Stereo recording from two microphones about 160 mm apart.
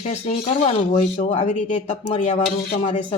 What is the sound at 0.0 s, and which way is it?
Speech, 45° left (ahead or behind).